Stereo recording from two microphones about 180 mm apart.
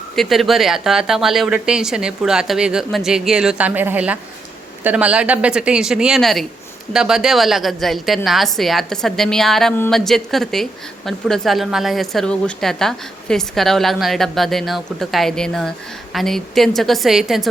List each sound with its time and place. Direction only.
0.2 s a woman's voice: centre (ahead or behind)